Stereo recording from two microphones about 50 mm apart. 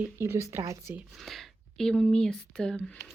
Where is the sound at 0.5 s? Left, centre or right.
Right.